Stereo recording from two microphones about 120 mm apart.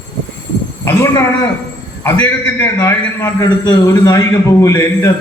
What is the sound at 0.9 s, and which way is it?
A man's voice, 25° left (ahead or behind).